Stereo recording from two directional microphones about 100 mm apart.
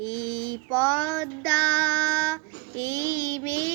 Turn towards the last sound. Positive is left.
turn(degrees=20)  # may be behind; listen again after turning